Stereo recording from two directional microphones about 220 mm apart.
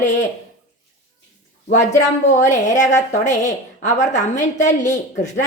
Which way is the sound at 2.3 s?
35° left (ahead or behind).